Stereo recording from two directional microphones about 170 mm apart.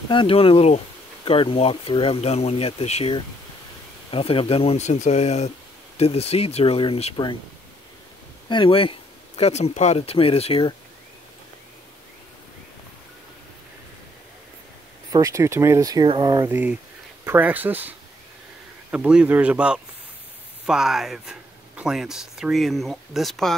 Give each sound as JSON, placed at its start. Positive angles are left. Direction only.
{"t": 0.1, "sound": "speech", "side_deg": 30}
{"t": 8.5, "sound": "speech", "side_deg": 30}
{"t": 15.0, "sound": "speech", "side_deg": -20}
{"t": 16.4, "sound": "speech", "side_deg": -10}